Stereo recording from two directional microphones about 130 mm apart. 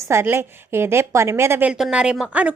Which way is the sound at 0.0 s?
20° right (ahead or behind).